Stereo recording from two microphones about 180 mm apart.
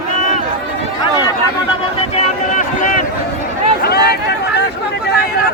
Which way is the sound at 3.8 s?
60° left (ahead or behind).